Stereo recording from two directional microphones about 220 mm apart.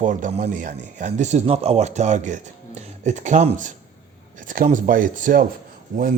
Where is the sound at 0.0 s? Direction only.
35° right (ahead or behind).